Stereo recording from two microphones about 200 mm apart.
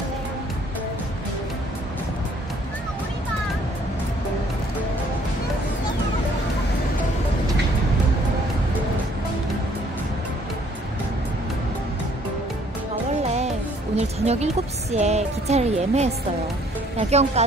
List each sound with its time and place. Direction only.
13.9 s speech: 30° right (ahead or behind)
17.1 s speech: 30° right (ahead or behind)